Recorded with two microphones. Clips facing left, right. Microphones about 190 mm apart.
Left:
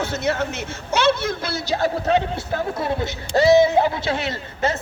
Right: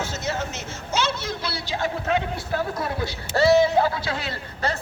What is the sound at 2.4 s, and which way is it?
A woman's voice, 25° left (ahead or behind).